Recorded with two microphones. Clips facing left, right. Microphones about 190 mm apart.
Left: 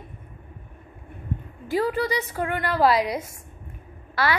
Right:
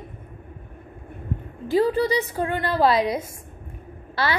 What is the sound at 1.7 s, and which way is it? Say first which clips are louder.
A woman's voice: right 4 dB; 25° right (ahead or behind).